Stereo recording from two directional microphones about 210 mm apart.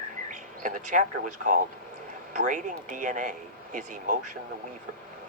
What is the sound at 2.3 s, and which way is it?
Speech, 35° right (ahead or behind).